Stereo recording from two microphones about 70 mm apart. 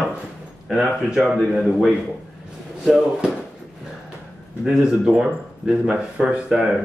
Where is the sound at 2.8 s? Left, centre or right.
Centre.